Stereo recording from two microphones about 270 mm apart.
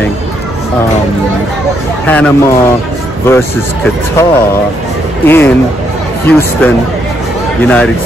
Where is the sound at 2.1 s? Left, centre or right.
Centre.